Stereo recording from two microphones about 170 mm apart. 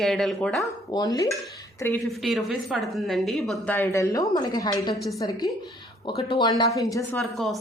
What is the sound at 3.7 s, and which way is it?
A woman's voice, 15° left (ahead or behind).